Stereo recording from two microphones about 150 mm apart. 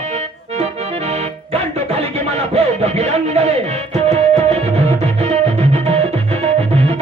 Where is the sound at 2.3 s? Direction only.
45° right (ahead or behind).